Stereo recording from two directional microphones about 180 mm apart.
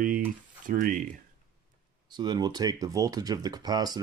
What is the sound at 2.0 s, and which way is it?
Speech, 25° right (ahead or behind).